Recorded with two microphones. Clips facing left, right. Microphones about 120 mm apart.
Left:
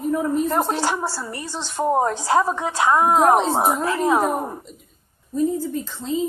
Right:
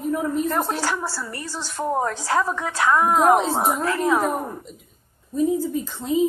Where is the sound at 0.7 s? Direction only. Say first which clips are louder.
Left 2 dB; 20° left (ahead or behind).